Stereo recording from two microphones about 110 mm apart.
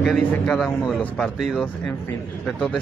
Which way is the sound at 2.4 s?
5° left (ahead or behind).